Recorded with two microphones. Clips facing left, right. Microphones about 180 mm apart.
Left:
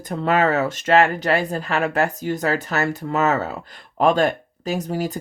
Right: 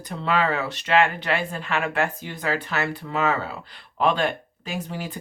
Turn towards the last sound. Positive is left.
turn(degrees=40)  # may be behind; listen again after turning